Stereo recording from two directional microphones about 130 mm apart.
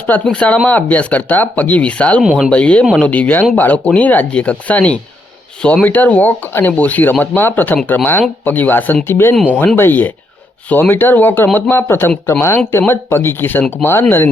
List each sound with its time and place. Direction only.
0.1 s speech: 10° left (ahead or behind)
2.2 s speech: 5° right (ahead or behind)
2.5 s speech: 10° left (ahead or behind)